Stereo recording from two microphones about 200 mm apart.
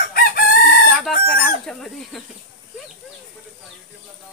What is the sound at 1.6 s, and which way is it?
Speech, centre (ahead or behind).